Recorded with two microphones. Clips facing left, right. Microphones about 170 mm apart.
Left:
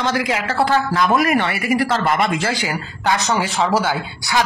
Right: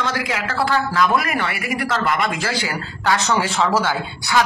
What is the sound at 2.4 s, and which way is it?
Speech, 15° left (ahead or behind).